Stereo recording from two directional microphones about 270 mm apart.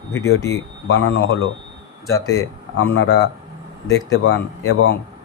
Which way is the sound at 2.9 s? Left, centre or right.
Left.